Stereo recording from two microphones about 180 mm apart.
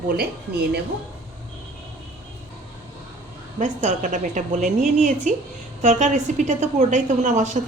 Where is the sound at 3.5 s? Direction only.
40° right (ahead or behind).